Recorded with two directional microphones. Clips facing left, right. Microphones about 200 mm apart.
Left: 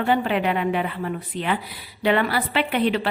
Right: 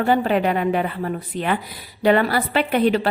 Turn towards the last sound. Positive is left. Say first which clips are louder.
# right 3 dB
turn(degrees=-40)  # may be behind; listen again after turning